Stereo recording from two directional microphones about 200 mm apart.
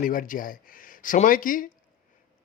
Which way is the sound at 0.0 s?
45° left (ahead or behind).